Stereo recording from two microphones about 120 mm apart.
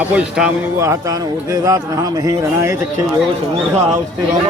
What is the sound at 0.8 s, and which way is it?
Speech, 25° right (ahead or behind).